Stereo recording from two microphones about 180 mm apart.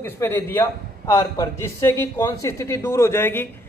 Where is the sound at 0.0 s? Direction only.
10° left (ahead or behind).